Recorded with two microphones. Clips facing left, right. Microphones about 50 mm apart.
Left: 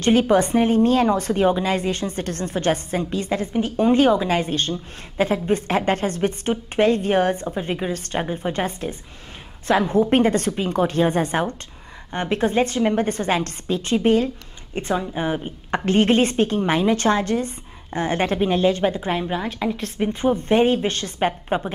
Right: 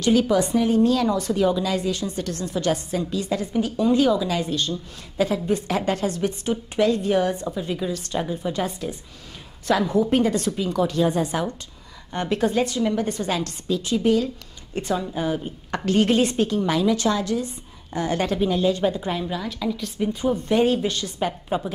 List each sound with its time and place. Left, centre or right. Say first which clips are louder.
0.0 s a woman's voice: left 2 dB; left